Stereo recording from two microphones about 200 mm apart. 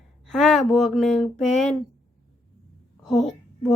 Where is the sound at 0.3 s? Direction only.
Centre (ahead or behind).